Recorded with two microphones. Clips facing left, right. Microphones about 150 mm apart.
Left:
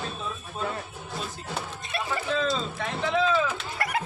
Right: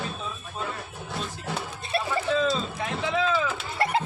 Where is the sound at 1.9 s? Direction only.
30° right (ahead or behind).